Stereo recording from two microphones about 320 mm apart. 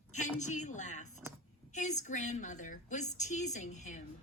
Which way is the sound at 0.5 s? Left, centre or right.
Left.